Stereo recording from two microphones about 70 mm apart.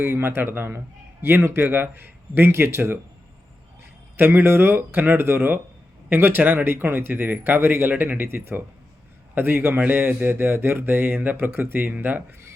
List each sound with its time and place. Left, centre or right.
0.0 s speech: right
4.2 s speech: right